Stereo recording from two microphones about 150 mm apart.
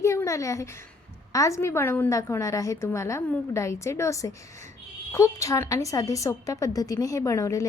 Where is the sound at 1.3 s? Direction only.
20° left (ahead or behind).